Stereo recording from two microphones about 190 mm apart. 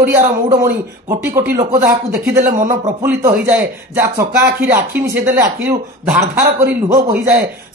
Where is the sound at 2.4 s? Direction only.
45° right (ahead or behind).